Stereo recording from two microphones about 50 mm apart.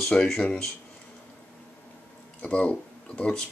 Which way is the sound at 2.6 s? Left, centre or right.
Left.